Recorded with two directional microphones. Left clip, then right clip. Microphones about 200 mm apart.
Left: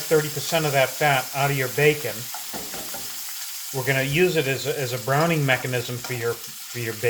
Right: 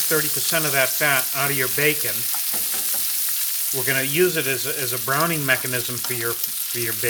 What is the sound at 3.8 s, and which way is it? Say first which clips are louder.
Frying: right 1 dB; 20° right (ahead or behind).